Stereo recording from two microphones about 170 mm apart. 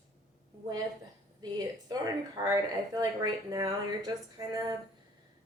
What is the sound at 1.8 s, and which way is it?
Speech, 25° right (ahead or behind).